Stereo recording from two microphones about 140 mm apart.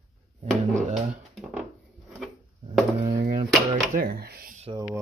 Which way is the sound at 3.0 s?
85° right.